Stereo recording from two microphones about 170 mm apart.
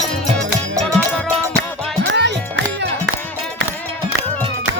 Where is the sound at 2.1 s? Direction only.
90° right.